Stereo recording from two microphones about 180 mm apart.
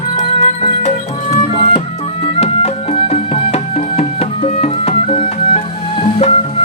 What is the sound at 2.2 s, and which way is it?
Music, 35° left (ahead or behind).